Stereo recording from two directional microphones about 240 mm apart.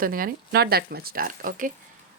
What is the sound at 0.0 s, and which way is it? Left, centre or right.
Speech, right.